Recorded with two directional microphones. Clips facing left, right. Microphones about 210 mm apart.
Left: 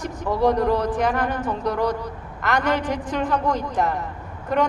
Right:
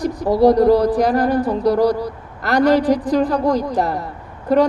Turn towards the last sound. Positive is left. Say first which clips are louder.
# right 7 dB
turn(degrees=-35)  # may be behind; listen again after turning